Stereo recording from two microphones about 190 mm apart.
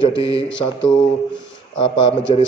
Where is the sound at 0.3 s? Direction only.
75° left (ahead or behind).